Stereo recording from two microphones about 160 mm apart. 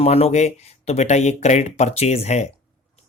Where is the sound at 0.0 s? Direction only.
40° left (ahead or behind).